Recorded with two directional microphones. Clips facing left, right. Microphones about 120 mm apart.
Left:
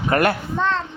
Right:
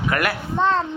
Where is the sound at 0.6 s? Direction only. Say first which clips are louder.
Right 3 dB; 35° right (ahead or behind).